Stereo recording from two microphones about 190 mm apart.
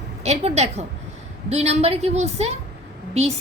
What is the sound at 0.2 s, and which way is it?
A woman's voice, 35° right (ahead or behind).